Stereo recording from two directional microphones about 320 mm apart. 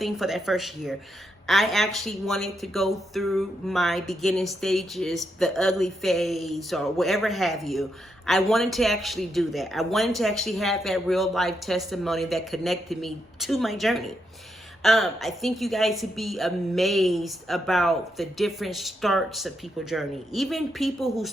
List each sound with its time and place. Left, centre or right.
0.0 s a woman's voice: centre